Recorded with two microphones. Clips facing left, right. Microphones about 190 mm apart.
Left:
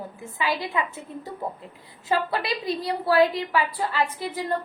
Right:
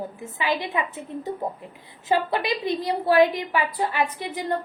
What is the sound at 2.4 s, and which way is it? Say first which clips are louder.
A woman's voice: right 2 dB; 20° right (ahead or behind).